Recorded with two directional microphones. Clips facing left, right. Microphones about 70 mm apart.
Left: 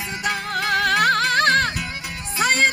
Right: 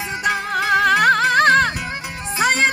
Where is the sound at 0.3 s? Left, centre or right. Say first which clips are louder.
Right 4 dB; centre.